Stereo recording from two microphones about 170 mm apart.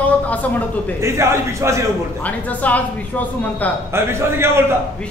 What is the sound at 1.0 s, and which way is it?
Speech, 15° right (ahead or behind).